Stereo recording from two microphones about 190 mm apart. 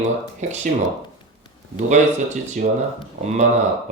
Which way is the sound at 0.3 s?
40° right (ahead or behind).